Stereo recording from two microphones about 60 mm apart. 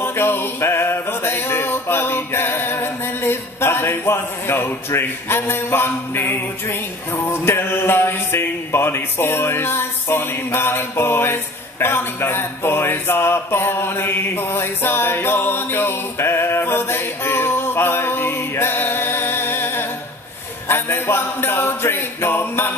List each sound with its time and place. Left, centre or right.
0.0 s music: left
11.8 s speech: left
20.6 s a sound: left